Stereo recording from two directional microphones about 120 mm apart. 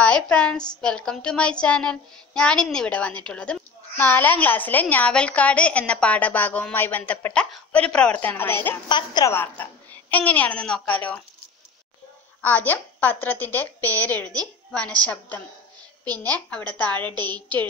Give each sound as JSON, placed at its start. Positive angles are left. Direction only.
{"t": 0.0, "sound": "a woman's voice", "side_deg": 10}
{"t": 0.7, "sound": "child singing", "side_deg": 5}
{"t": 8.8, "sound": "a woman's voice", "side_deg": 40}
{"t": 9.3, "sound": "child singing", "side_deg": 15}
{"t": 12.4, "sound": "child singing", "side_deg": 15}
{"t": 17.1, "sound": "a woman's voice", "side_deg": -35}